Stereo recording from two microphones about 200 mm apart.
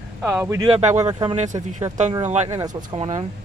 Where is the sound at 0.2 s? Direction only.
10° right (ahead or behind).